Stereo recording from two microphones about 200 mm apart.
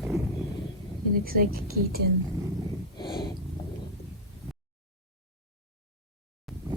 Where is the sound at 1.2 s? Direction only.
45° right (ahead or behind).